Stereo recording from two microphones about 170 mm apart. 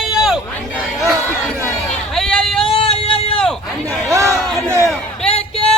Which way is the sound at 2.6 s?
35° left (ahead or behind).